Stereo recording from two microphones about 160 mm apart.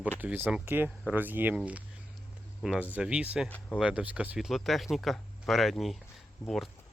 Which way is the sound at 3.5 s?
10° left (ahead or behind).